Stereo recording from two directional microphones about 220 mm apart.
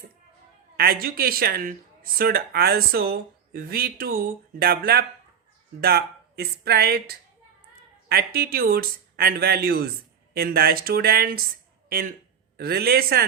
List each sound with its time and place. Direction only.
0.8 s speech: 45° right (ahead or behind)